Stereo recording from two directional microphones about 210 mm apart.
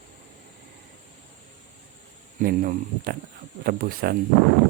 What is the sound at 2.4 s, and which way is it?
Speech, 40° right (ahead or behind).